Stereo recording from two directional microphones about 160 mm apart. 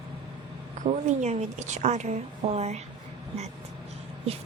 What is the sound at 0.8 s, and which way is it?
A woman's voice, 45° right (ahead or behind).